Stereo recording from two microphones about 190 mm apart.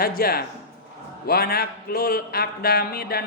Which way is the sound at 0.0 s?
50° left (ahead or behind).